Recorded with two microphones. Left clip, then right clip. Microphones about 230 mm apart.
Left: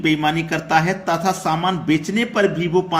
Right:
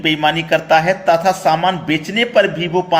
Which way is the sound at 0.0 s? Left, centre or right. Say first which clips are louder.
Right 4 dB; centre.